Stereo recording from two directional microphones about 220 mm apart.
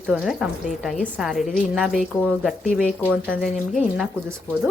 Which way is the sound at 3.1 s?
5° right (ahead or behind).